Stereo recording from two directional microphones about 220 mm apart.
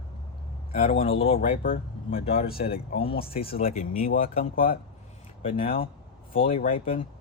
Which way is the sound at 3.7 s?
35° left (ahead or behind).